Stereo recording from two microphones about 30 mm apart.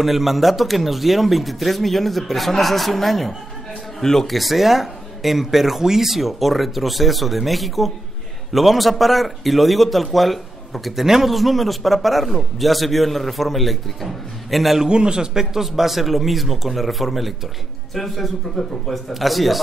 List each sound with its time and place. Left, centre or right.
0.0 s a man's voice: centre
4.0 s a man's voice: centre
4.3 s a man's voice: centre
14.9 s a man's voice: right
15.5 s a man's voice: centre